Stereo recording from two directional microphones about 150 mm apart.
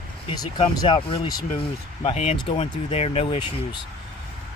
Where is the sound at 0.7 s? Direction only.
30° left (ahead or behind).